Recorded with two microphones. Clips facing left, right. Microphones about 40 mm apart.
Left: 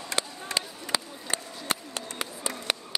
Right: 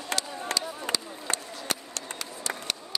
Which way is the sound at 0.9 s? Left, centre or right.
Right.